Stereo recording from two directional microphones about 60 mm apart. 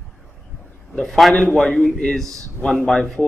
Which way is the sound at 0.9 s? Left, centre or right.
Centre.